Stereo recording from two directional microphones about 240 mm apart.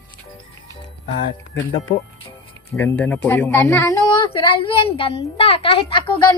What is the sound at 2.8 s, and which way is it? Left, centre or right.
A woman's voice, centre.